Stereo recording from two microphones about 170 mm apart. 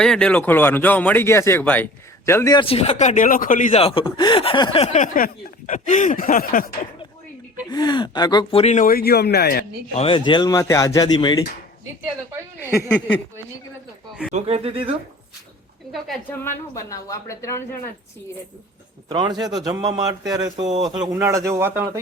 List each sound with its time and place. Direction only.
0.0 s speech: 5° left (ahead or behind)
2.6 s speech: 35° left (ahead or behind)
3.8 s speech: 35° left (ahead or behind); by 6.7 s 55° left (ahead or behind)
7.7 s speech: 25° left (ahead or behind); by 9.6 s 70° left (ahead or behind)
9.9 s speech: 35° left (ahead or behind)
14.3 s speech: 35° right (ahead or behind)
16.4 s speech: 15° left (ahead or behind)
19.0 s speech: 25° right (ahead or behind)